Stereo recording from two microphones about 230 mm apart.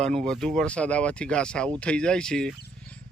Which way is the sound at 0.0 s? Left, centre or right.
Centre.